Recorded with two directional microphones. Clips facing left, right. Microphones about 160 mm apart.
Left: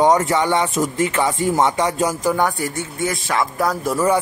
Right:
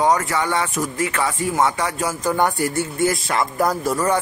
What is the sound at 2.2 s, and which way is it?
Speech, centre (ahead or behind).